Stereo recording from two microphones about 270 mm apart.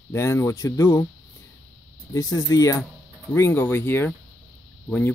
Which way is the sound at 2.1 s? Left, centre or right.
Centre.